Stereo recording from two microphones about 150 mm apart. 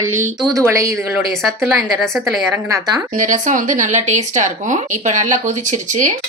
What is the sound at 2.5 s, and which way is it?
Speech, 25° right (ahead or behind).